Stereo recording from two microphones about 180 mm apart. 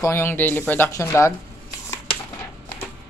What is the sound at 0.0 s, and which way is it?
Speech, 15° left (ahead or behind).